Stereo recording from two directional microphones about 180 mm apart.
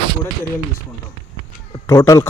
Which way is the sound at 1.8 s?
15° left (ahead or behind).